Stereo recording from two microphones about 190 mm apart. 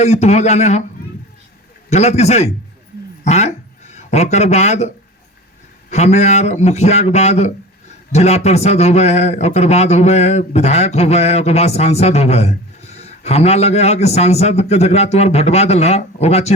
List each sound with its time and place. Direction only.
0.0 s speech: 35° left (ahead or behind)
1.9 s speech: 35° left (ahead or behind)
5.9 s speech: 35° left (ahead or behind)